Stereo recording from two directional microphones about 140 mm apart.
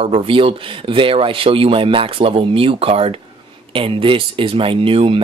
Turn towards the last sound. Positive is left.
turn(degrees=-40)  # may be behind; listen again after turning